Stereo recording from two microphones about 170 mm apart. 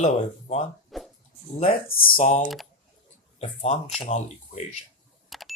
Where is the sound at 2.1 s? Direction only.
40° left (ahead or behind).